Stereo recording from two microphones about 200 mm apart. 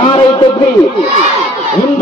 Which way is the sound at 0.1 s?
25° left (ahead or behind).